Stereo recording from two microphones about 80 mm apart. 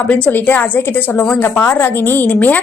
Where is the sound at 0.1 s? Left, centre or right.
Left.